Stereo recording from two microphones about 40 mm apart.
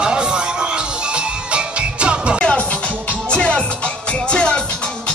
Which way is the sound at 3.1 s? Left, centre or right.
Left.